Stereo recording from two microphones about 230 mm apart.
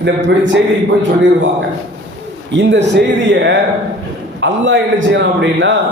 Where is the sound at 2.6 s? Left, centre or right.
Right.